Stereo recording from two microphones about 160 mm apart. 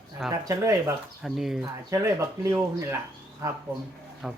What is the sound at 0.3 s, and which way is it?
Speech, 20° right (ahead or behind).